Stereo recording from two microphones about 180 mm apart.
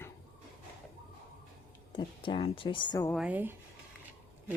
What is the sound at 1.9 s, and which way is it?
Speech, 25° left (ahead or behind).